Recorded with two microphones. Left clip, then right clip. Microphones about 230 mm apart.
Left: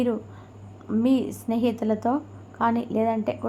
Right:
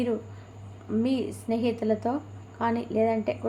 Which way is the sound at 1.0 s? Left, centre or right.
Left.